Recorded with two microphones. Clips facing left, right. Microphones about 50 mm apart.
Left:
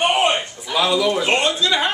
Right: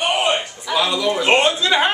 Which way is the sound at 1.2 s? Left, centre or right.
Centre.